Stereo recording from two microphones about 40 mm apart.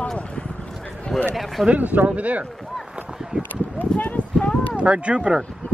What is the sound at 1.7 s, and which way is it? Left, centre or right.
Speech, right.